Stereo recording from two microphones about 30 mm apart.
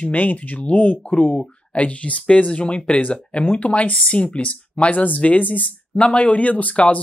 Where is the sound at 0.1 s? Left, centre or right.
Left.